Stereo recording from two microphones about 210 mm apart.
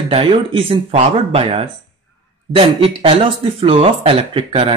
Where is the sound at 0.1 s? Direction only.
25° right (ahead or behind).